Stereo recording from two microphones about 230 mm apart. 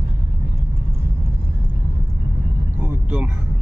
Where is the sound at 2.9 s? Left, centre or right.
Centre.